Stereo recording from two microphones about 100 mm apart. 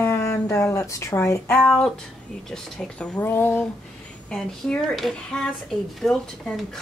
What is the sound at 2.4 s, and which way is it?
Speech, 5° left (ahead or behind).